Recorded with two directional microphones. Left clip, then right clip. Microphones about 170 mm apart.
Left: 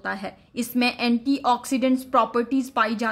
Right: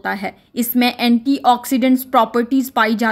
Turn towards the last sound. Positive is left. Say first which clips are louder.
# right 7 dB
turn(degrees=-25)  # may be behind; listen again after turning